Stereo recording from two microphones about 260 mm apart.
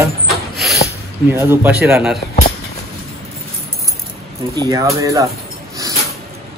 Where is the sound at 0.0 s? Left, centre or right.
Centre.